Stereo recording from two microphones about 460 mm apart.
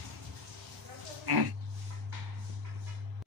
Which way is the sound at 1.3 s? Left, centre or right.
Right.